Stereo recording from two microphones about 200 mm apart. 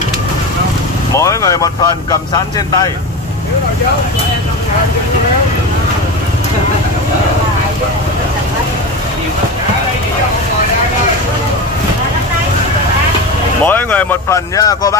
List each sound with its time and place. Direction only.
1.1 s speech: 15° left (ahead or behind)
13.7 s speech: 10° left (ahead or behind)